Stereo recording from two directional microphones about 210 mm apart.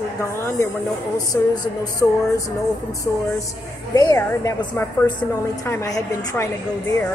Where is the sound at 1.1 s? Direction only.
15° left (ahead or behind).